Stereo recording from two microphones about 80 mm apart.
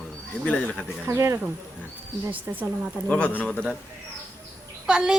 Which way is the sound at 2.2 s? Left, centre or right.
Right.